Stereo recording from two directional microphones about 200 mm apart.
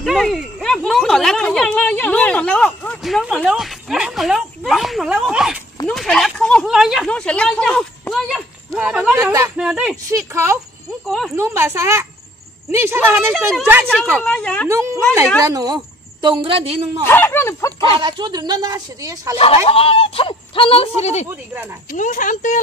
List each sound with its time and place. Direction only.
0.0 s speech: centre (ahead or behind)
11.1 s speech: centre (ahead or behind)
11.3 s speech: 15° right (ahead or behind)
14.2 s speech: 5° left (ahead or behind)
14.7 s a woman's voice: 15° right (ahead or behind)
17.0 s speech: 10° left (ahead or behind)
17.9 s speech: 25° right (ahead or behind)
19.3 s speech: 30° left (ahead or behind)